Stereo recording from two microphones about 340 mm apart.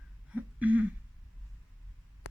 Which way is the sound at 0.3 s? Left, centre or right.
Centre.